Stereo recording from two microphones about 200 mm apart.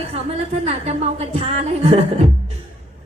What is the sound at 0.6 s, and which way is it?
A woman's voice, 30° right (ahead or behind).